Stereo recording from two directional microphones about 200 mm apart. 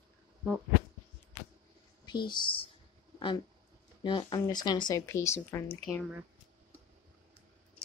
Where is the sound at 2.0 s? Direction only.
20° left (ahead or behind).